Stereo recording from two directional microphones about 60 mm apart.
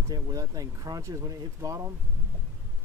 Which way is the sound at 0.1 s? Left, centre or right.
Right.